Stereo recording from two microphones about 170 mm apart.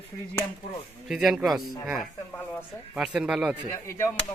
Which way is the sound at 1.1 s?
5° right (ahead or behind).